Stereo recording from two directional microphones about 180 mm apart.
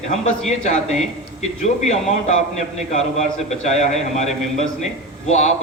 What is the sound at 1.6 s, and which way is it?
Speech, 40° left (ahead or behind).